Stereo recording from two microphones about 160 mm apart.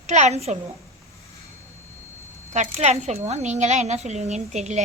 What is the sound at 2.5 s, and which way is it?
A woman's voice, 45° right (ahead or behind).